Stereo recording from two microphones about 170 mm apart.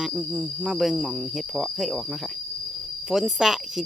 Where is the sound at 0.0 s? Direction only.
5° right (ahead or behind).